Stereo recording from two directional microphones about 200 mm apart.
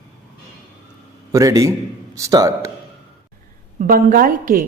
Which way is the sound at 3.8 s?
45° right (ahead or behind).